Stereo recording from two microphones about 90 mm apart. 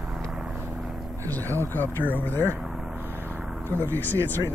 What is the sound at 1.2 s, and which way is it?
Speech, 20° left (ahead or behind).